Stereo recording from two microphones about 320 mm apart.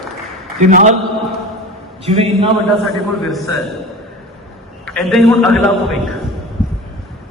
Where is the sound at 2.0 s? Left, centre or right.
Centre.